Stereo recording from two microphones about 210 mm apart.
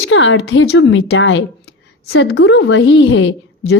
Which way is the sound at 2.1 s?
55° left (ahead or behind).